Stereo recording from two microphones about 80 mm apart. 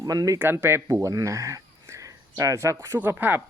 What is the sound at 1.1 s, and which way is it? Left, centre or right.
Speech, right.